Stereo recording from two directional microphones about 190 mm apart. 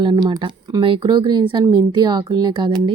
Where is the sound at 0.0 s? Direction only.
25° right (ahead or behind).